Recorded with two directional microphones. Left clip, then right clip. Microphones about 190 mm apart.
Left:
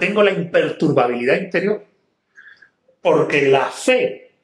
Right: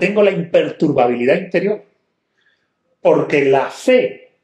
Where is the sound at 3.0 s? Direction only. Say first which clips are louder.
Right 2 dB; 20° right (ahead or behind).